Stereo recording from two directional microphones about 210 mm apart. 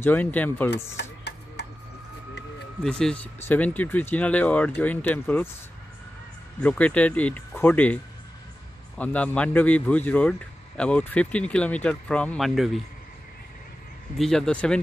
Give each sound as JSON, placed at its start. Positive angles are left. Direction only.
{"t": 0.0, "sound": "speech", "side_deg": 10}
{"t": 1.0, "sound": "speech", "side_deg": 55}
{"t": 1.6, "sound": "a sound", "side_deg": 55}
{"t": 2.8, "sound": "speech", "side_deg": 5}
{"t": 6.6, "sound": "speech", "side_deg": 5}
{"t": 14.1, "sound": "speech", "side_deg": 0}